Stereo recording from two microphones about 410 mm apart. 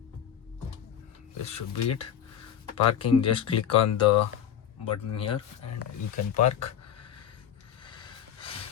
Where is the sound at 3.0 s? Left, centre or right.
Centre.